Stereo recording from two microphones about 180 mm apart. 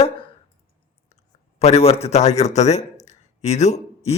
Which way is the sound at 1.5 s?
35° left (ahead or behind).